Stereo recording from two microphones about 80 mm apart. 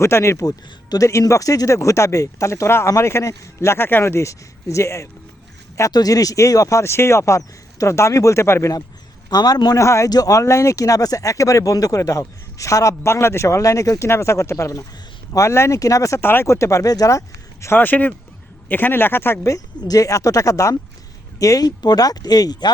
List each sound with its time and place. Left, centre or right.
0.0 s speech: left
0.4 s speech: left
5.9 s speech: left
9.3 s speech: left
9.7 s speech: left
10.1 s speech: left
16.2 s speech: left
16.5 s speech: left
17.7 s speech: left
19.9 s speech: left